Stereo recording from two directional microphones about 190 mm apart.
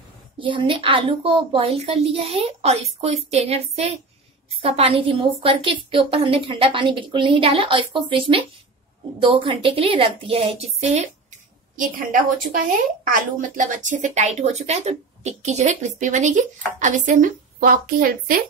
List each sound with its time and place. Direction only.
0.4 s a woman's voice: 25° right (ahead or behind)
11.7 s a woman's voice: 45° right (ahead or behind)